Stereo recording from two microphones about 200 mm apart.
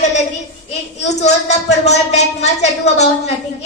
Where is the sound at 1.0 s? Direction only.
35° left (ahead or behind).